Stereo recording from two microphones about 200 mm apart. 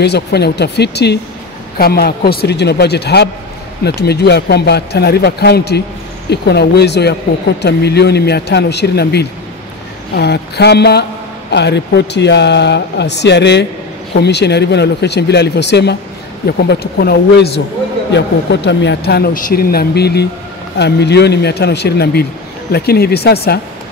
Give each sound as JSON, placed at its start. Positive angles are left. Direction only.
{"t": 0.0, "sound": "speech", "side_deg": 55}